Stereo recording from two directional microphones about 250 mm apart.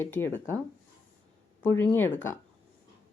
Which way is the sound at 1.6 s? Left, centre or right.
Centre.